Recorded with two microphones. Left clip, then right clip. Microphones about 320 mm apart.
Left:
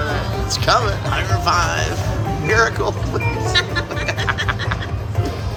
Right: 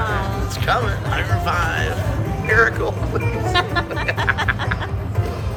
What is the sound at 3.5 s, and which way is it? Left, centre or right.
Music, centre.